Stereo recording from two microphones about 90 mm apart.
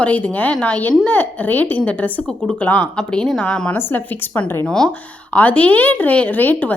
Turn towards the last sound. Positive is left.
turn(degrees=20)  # may be behind; listen again after turning